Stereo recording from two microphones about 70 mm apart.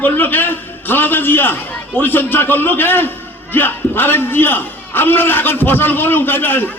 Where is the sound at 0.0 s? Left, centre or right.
Left.